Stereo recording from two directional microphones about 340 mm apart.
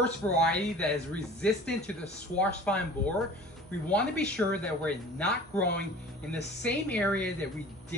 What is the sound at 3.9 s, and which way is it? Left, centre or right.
Speech, centre.